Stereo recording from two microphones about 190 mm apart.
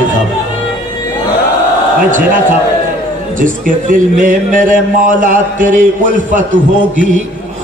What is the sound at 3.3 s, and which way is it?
Speech, 45° right (ahead or behind).